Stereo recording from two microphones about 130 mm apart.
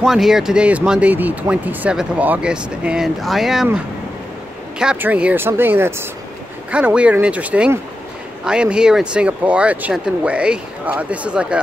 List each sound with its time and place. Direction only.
0.0 s speech: 5° right (ahead or behind)
4.7 s speech: 10° right (ahead or behind)